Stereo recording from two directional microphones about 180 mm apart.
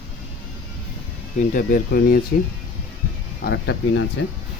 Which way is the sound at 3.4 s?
85° left.